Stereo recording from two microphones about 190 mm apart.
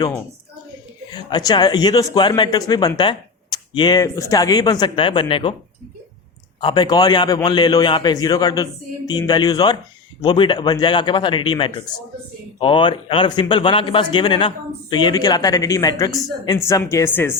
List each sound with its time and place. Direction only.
1.1 s a man's voice: 20° left (ahead or behind)
6.6 s a man's voice: 25° left (ahead or behind)